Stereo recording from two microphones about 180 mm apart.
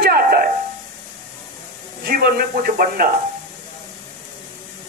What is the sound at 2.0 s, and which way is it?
Speech, 55° right (ahead or behind).